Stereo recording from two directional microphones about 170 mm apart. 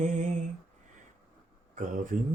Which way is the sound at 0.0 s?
45° right (ahead or behind).